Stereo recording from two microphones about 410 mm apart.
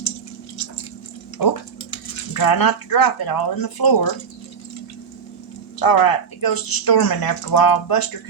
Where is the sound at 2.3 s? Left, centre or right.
Left.